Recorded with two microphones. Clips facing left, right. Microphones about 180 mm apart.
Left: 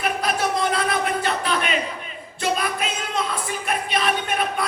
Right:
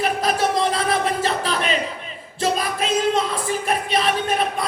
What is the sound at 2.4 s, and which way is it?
Singing, 35° right (ahead or behind).